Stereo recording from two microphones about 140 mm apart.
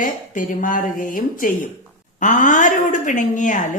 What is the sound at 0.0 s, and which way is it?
Speech, 70° left (ahead or behind).